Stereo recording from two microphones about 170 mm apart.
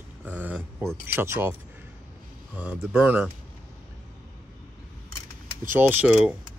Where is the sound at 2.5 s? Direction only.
10° right (ahead or behind).